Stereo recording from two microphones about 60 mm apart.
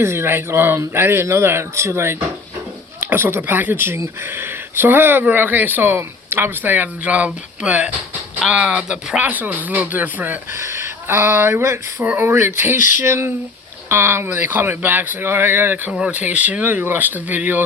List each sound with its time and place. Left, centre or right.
0.0 s speech: right
3.0 s speech: right; by 9.2 s centre
9.2 s speech: right
10.6 s speech: right
14.3 s speech: right
15.9 s speech: centre
16.1 s speech: right